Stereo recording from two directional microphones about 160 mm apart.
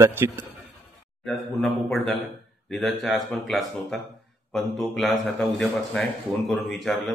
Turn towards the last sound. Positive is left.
turn(degrees=0)  # may be behind; listen again after turning